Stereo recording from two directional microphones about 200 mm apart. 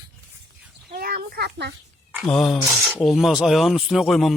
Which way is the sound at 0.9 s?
50° right (ahead or behind).